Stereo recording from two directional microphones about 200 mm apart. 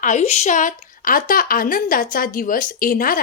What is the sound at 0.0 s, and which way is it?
A woman's voice, 35° left (ahead or behind).